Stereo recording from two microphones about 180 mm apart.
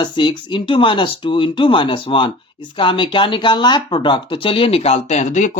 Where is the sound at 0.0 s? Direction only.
25° left (ahead or behind).